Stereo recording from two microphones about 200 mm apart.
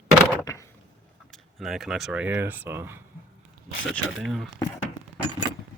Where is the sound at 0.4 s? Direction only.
15° left (ahead or behind).